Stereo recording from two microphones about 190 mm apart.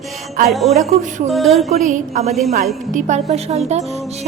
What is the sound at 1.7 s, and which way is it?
Speech, 40° right (ahead or behind).